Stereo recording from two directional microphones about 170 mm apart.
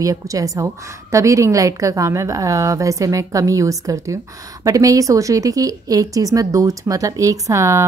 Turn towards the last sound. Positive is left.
turn(degrees=-15)  # may be behind; listen again after turning